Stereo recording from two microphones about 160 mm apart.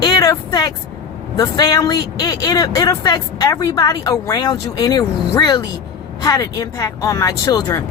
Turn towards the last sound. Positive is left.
turn(degrees=25)  # may be behind; listen again after turning